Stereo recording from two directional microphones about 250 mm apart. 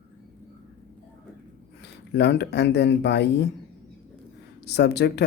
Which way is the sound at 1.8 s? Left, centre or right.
Left.